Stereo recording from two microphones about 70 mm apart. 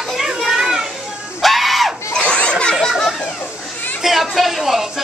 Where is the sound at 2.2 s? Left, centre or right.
Centre.